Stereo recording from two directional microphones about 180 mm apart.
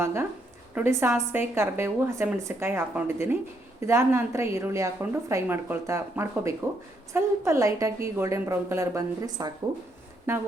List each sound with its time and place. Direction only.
0.0 s a woman's voice: 15° right (ahead or behind)